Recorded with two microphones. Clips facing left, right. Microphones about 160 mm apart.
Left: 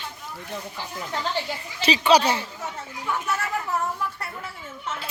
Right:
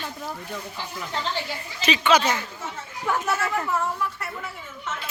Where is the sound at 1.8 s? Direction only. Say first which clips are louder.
Left 2 dB; 35° left (ahead or behind).